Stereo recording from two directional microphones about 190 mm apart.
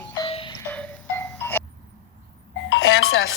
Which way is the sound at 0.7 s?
10° left (ahead or behind).